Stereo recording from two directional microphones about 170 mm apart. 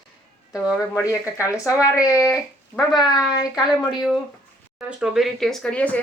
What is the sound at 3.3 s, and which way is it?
Speech, 5° right (ahead or behind).